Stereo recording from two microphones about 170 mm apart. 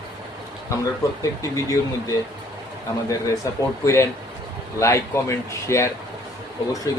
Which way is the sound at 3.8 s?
15° left (ahead or behind).